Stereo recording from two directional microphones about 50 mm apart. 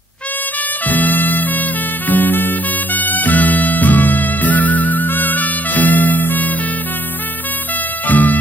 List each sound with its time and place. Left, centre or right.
0.8 s music: left
8.1 s music: left